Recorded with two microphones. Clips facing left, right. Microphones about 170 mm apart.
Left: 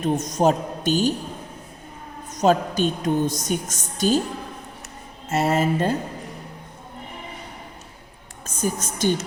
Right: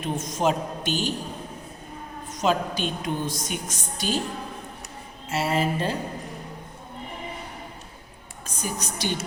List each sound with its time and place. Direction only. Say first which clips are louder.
0.3 s a woman's voice: left 2 dB; 40° left (ahead or behind)
2.4 s a woman's voice: left 5 dB; 45° left (ahead or behind)
5.3 s a woman's voice: left 4 dB; 45° left (ahead or behind)
8.4 s a woman's voice: left 6 dB; 45° left (ahead or behind)